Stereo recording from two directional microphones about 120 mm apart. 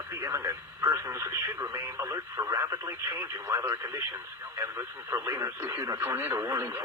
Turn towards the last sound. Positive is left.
turn(degrees=-25)  # may be behind; listen again after turning